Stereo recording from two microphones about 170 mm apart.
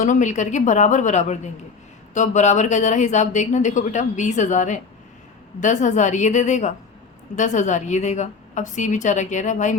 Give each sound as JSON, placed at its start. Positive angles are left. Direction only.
{"t": 0.0, "sound": "speech", "side_deg": 45}